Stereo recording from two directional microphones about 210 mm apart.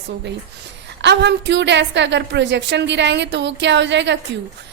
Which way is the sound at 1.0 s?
55° right (ahead or behind).